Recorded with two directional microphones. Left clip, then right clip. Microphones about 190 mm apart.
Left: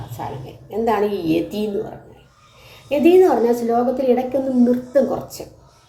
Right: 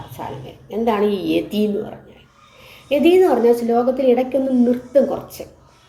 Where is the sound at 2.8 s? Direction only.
20° right (ahead or behind).